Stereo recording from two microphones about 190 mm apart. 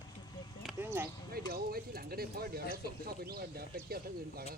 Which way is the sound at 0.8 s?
10° right (ahead or behind).